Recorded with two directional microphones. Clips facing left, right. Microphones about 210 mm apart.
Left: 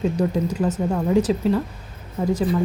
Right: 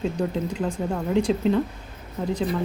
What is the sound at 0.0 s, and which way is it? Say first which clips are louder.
Speech: left 4 dB; 10° left (ahead or behind).